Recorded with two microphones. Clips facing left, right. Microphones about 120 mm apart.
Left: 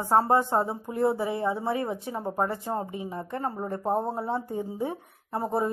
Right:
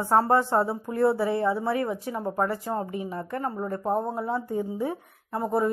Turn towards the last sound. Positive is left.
turn(degrees=30)  # may be behind; listen again after turning